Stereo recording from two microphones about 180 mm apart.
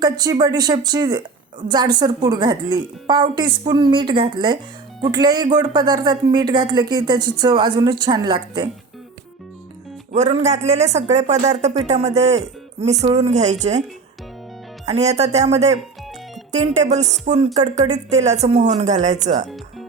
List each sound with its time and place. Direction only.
0.0 s speech: 20° right (ahead or behind)
10.2 s speech: 35° right (ahead or behind)
14.8 s speech: 35° right (ahead or behind)